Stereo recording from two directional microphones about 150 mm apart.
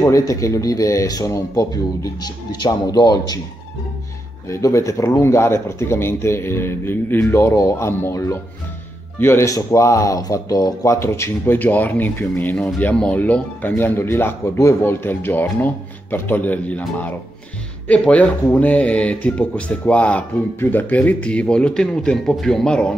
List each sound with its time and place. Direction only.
0.0 s speech: 20° left (ahead or behind)
4.5 s speech: 20° left (ahead or behind); by 22.9 s 5° left (ahead or behind)